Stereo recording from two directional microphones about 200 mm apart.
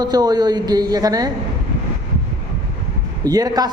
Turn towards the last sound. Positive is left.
turn(degrees=-20)  # may be behind; listen again after turning